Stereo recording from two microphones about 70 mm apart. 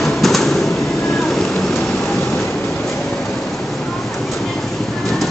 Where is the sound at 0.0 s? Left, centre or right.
Centre.